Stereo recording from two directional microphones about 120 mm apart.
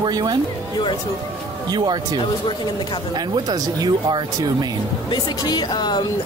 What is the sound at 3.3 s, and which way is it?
Speech, 35° right (ahead or behind).